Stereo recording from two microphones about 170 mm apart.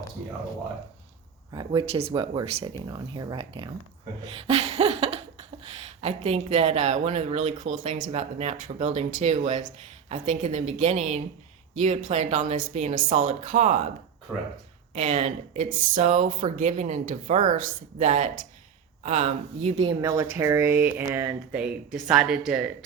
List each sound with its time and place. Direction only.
1.5 s speech: 30° right (ahead or behind)
14.9 s speech: 45° right (ahead or behind)
20.0 s speech: 15° right (ahead or behind)